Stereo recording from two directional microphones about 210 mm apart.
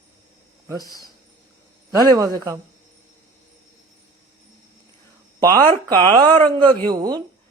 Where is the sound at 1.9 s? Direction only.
15° right (ahead or behind).